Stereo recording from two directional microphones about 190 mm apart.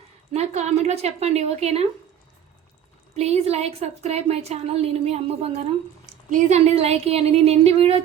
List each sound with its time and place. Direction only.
0.3 s a woman's voice: 35° right (ahead or behind)
3.2 s a woman's voice: 35° right (ahead or behind)